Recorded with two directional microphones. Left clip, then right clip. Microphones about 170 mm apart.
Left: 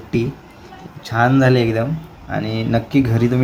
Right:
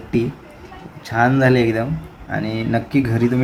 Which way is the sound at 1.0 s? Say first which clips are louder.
Left 1 dB; 5° left (ahead or behind).